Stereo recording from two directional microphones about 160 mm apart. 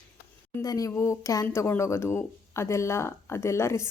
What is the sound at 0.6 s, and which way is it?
A woman's voice, 20° left (ahead or behind).